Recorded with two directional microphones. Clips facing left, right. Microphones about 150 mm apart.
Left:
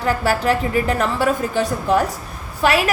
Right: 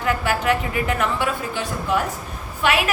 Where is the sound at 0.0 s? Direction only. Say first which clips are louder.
Left 3 dB; 35° left (ahead or behind).